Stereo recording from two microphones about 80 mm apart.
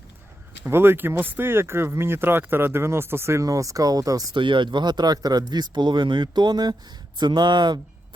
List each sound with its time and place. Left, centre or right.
0.6 s speech: right
4.4 s speech: right